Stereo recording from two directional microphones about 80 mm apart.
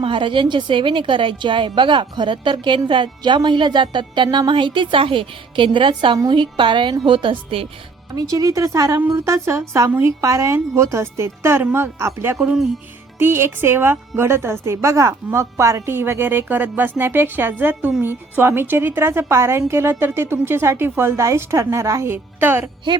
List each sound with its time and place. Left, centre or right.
0.1 s a woman's voice: right
8.1 s a woman's voice: right
12.4 s speech: centre
13.1 s a woman's voice: right